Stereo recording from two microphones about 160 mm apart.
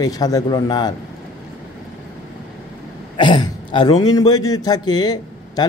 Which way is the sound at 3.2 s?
30° left (ahead or behind).